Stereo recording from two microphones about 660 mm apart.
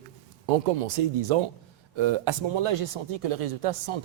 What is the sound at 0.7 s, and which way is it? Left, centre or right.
Speech, right.